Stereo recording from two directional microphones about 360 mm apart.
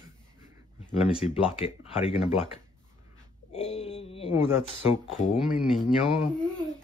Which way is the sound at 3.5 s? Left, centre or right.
Centre.